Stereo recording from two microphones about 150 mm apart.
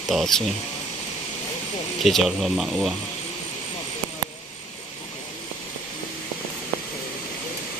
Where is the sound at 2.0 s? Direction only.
Centre (ahead or behind).